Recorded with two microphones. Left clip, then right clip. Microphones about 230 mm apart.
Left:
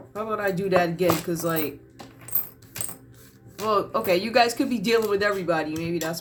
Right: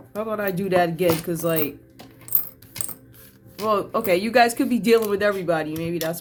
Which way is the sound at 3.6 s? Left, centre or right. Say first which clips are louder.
Right 1 dB; right.